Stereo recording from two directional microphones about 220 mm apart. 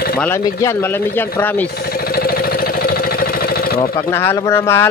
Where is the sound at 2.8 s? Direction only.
45° left (ahead or behind).